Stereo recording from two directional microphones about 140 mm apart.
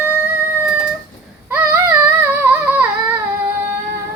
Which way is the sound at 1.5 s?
10° right (ahead or behind).